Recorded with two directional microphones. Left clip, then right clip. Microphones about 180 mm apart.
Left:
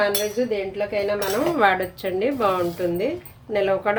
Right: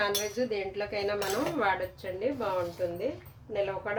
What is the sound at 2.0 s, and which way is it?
Speech, 45° left (ahead or behind).